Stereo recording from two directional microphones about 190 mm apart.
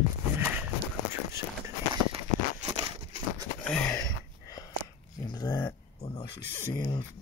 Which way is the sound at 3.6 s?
5° left (ahead or behind).